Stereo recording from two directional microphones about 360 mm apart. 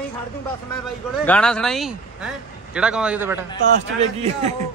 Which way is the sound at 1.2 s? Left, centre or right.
Centre.